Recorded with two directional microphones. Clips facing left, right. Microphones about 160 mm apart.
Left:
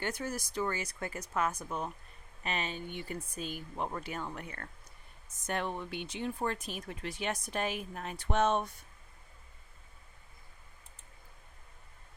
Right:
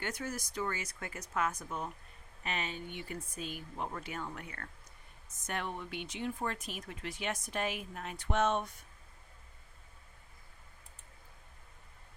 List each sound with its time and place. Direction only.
0.0 s speech: 30° left (ahead or behind)